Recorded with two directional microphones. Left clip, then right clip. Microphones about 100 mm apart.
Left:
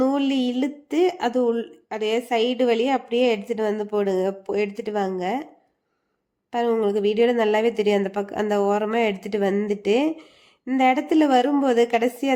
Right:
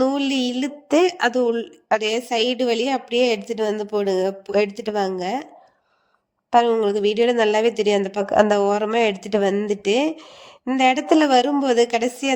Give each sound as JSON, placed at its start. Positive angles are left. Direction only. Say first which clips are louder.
{"t": 0.0, "sound": "a woman's voice", "louder": "right 1 dB", "side_deg": -50}
{"t": 6.5, "sound": "a woman's voice", "louder": "right 5 dB", "side_deg": -40}
{"t": 10.8, "sound": "a woman's voice", "louder": "right 2 dB", "side_deg": -50}